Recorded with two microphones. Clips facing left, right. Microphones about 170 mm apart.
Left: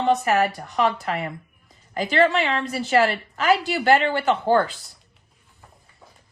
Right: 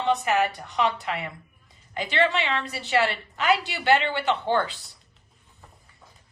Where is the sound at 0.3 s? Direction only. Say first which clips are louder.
Left 3 dB; 40° left (ahead or behind).